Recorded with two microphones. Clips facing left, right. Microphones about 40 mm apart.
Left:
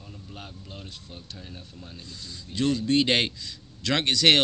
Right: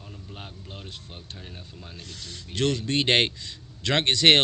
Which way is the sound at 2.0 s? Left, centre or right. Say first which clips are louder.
Right 2 dB; right.